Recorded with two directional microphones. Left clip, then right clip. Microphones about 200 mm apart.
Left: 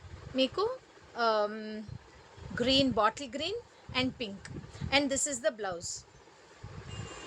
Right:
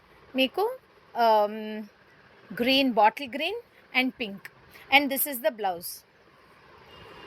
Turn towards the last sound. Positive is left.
turn(degrees=-15)  # may be behind; listen again after turning